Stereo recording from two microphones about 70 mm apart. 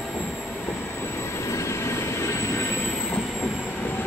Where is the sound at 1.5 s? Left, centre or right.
Left.